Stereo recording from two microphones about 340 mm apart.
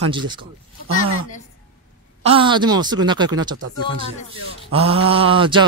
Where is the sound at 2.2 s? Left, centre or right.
Centre.